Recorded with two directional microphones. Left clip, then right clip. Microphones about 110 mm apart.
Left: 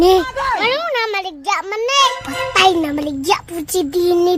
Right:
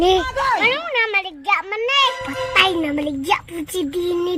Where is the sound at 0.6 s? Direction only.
30° left (ahead or behind).